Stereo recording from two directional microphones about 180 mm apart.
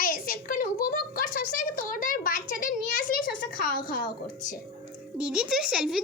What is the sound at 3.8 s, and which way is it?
Speech, 55° left (ahead or behind).